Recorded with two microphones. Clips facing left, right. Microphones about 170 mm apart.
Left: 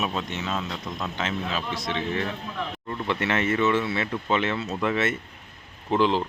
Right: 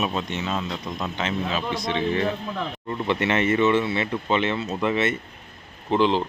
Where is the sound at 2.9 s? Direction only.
15° right (ahead or behind).